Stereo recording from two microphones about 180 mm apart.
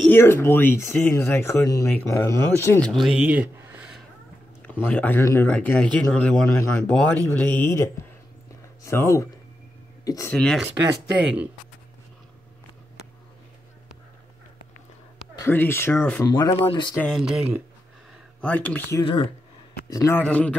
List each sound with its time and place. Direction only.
0.0 s speech: 10° left (ahead or behind); by 4.0 s 10° right (ahead or behind)
4.6 s speech: 10° left (ahead or behind)
10.3 s speech: 5° left (ahead or behind)
10.9 s speech: 5° right (ahead or behind)
15.3 s speech: 15° left (ahead or behind)
16.9 s speech: 5° left (ahead or behind)
18.4 s speech: 10° left (ahead or behind)